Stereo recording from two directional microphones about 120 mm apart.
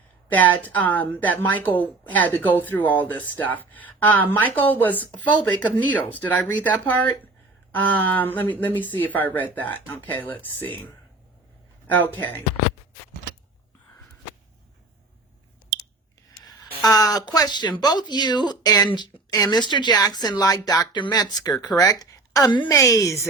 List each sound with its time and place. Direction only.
0.3 s a woman's voice: 15° left (ahead or behind)
16.8 s speech: 30° left (ahead or behind)
22.7 s a woman's voice: 25° left (ahead or behind)